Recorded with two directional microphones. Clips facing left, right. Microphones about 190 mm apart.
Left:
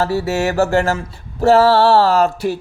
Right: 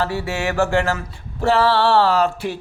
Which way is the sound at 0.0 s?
40° left (ahead or behind).